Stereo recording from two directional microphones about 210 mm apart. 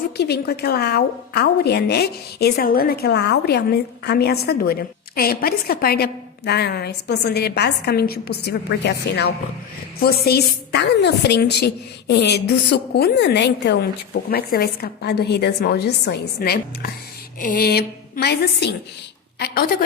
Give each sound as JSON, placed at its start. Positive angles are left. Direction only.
{"t": 0.2, "sound": "a woman's voice", "side_deg": 50}